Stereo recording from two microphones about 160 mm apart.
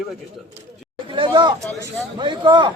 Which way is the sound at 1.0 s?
30° right (ahead or behind).